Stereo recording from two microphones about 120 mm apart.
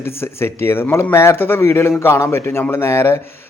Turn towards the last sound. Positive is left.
turn(degrees=20)  # may be behind; listen again after turning